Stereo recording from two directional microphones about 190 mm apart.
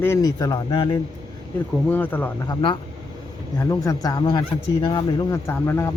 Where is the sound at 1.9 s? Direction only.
10° left (ahead or behind).